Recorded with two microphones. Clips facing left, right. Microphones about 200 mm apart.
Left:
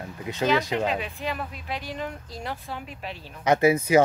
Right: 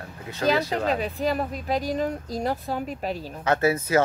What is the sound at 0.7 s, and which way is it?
Speech, 40° right (ahead or behind).